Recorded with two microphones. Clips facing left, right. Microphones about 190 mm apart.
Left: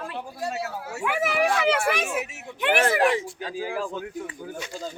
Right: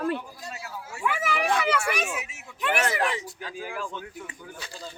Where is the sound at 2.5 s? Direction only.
30° left (ahead or behind).